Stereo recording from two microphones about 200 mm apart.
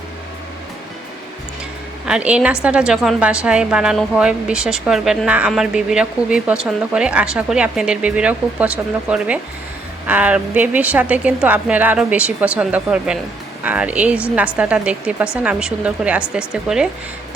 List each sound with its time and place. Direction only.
2.0 s a woman's voice: 5° right (ahead or behind)